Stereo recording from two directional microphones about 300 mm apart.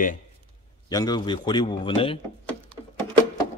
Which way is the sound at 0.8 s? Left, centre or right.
Centre.